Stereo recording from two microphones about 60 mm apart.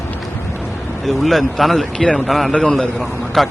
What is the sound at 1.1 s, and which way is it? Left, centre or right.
Speech, centre.